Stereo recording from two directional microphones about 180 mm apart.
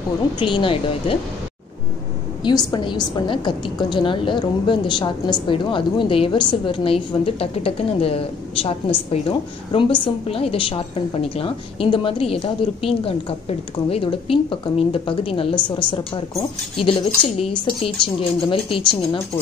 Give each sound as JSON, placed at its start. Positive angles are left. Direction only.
{"t": 0.4, "sound": "a woman's voice", "side_deg": 30}
{"t": 2.4, "sound": "a woman's voice", "side_deg": 25}
{"t": 16.8, "sound": "a woman's voice", "side_deg": 30}